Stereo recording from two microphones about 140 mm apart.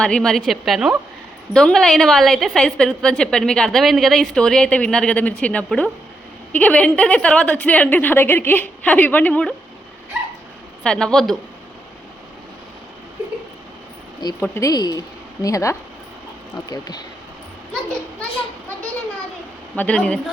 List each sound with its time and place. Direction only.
0.0 s a woman's voice: 5° left (ahead or behind)
10.8 s a woman's voice: 5° left (ahead or behind)
14.4 s speech: 20° left (ahead or behind)
19.7 s a woman's voice: 10° left (ahead or behind)